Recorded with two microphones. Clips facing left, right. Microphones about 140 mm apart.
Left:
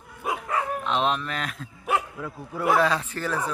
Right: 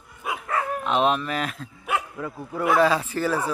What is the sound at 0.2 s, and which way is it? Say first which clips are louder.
Bow-wow: left 2 dB; 40° left (ahead or behind).